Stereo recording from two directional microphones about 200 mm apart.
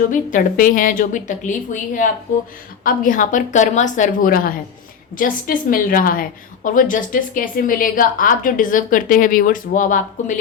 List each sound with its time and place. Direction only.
0.1 s a woman's voice: 40° left (ahead or behind)